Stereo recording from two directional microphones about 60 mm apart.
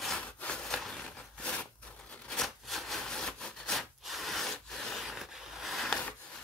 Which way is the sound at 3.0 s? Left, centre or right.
Centre.